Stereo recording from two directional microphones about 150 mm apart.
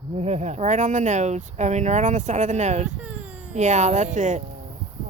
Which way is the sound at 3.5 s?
50° right (ahead or behind).